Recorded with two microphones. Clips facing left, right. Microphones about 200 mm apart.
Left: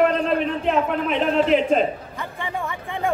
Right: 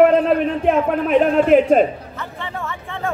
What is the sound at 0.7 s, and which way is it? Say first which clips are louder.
A man's voice: right 5 dB; 50° right (ahead or behind).